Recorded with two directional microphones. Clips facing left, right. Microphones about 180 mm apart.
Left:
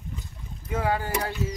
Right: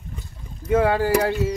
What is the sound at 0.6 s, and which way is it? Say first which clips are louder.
Speech: right 9 dB; 75° right (ahead or behind).